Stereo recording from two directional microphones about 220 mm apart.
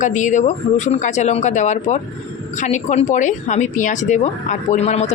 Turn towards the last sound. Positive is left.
turn(degrees=30)  # may be behind; listen again after turning